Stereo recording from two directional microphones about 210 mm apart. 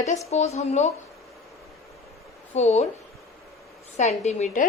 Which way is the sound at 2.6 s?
30° left (ahead or behind).